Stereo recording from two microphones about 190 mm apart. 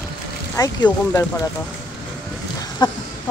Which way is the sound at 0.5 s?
15° left (ahead or behind).